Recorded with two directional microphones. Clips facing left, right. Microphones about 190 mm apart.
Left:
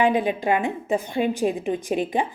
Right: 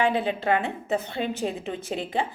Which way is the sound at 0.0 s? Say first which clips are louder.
Left 3 dB; 15° left (ahead or behind).